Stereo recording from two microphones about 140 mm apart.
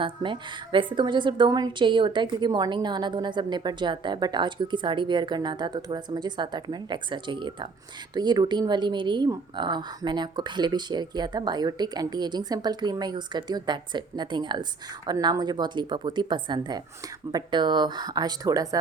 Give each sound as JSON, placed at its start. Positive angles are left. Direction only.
{"t": 0.0, "sound": "a woman's voice", "side_deg": -35}